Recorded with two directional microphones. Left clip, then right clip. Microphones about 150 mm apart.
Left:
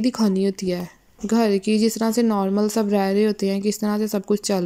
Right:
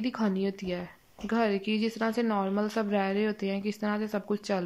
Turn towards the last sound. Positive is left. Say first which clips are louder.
# left 8 dB
turn(degrees=25)  # may be behind; listen again after turning